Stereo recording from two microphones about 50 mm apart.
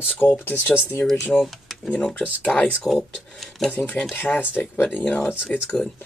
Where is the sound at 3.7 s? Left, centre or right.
Left.